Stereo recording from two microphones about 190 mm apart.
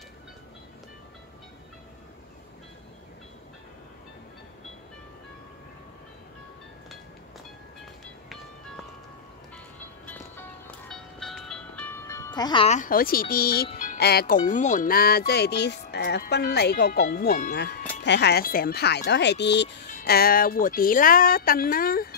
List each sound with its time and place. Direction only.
10.0 s music: 10° left (ahead or behind)
11.9 s music: 15° left (ahead or behind)
12.6 s music: 40° left (ahead or behind)
18.0 s speech: 65° left (ahead or behind)
19.9 s music: 50° left (ahead or behind)